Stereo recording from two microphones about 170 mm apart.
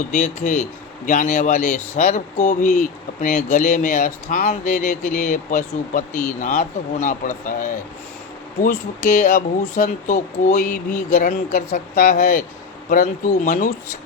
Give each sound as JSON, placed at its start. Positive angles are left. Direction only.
{"t": 0.1, "sound": "speech", "side_deg": 50}
{"t": 12.9, "sound": "speech", "side_deg": 55}